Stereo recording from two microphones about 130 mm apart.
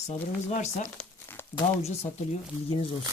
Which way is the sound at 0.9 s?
15° left (ahead or behind).